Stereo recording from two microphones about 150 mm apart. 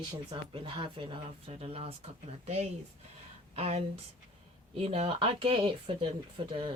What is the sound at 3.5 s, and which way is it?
Speech, 40° right (ahead or behind).